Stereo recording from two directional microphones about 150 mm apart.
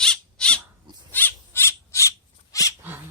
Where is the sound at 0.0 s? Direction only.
5° left (ahead or behind).